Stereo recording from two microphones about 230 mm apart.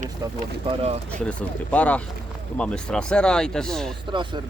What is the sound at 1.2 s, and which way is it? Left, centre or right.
Speech, centre.